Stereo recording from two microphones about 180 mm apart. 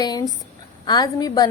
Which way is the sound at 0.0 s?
20° left (ahead or behind).